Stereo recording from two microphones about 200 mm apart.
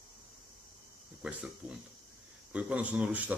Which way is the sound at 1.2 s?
5° right (ahead or behind).